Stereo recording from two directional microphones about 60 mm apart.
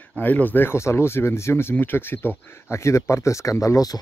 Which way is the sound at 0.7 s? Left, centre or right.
Left.